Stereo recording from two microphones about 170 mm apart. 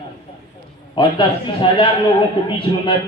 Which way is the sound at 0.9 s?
30° left (ahead or behind).